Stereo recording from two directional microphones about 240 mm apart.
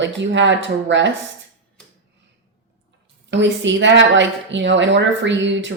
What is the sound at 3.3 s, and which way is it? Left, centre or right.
A woman's voice, right.